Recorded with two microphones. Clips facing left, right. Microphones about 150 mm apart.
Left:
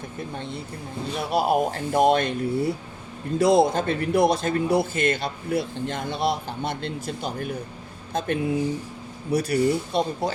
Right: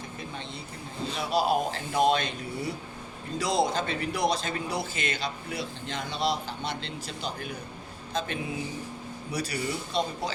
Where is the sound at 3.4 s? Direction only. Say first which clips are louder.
Left 8 dB; 55° left (ahead or behind).